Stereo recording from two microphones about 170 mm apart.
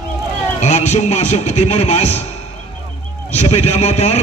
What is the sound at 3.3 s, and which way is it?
Speech, 40° left (ahead or behind).